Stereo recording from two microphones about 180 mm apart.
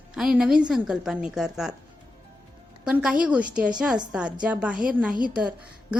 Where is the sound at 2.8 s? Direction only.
5° right (ahead or behind).